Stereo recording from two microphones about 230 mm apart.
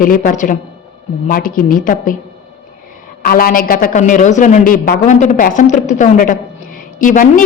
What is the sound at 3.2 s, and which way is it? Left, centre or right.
Speech, left.